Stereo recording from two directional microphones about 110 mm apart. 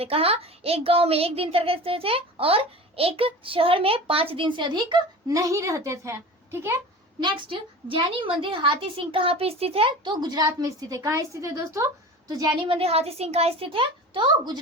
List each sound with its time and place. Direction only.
0.0 s a child's voice: 65° right (ahead or behind); by 5.4 s 45° right (ahead or behind)
5.4 s a woman's voice: 30° right (ahead or behind)
7.2 s a woman's voice: 45° right (ahead or behind); by 9.9 s 65° right (ahead or behind)
10.0 s a woman's voice: 40° right (ahead or behind)
12.3 s a child's voice: 40° right (ahead or behind)